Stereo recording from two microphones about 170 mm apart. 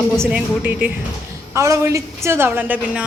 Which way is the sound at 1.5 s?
15° right (ahead or behind).